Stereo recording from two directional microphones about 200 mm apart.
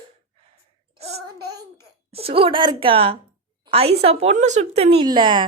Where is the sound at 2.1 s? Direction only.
30° right (ahead or behind).